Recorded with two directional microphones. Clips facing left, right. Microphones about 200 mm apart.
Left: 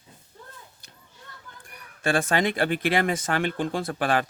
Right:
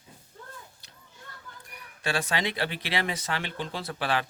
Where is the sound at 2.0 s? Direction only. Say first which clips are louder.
Left 6 dB; 50° left (ahead or behind).